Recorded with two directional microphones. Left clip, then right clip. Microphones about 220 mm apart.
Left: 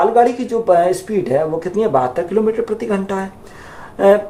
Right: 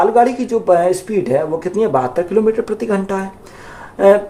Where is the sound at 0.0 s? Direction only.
25° right (ahead or behind).